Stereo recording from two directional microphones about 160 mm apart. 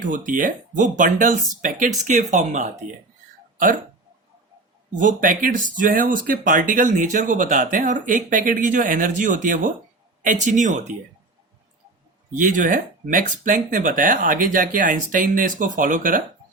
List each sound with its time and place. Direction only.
0.0 s speech: 55° right (ahead or behind)
4.9 s speech: 55° right (ahead or behind)
12.4 s speech: 55° right (ahead or behind)